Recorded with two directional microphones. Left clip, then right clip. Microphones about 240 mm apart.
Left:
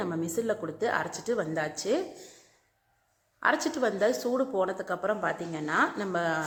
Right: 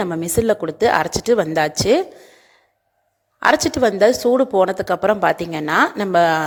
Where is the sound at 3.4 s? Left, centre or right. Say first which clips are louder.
Right 11 dB; right.